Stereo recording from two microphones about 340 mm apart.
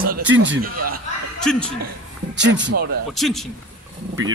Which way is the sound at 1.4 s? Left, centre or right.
Centre.